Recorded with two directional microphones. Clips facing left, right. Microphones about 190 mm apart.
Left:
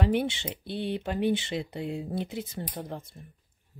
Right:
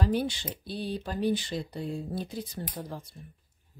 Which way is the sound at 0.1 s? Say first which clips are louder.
Left 2 dB; 25° left (ahead or behind).